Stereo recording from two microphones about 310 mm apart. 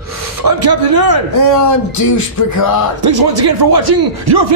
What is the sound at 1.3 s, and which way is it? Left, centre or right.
Speech, left.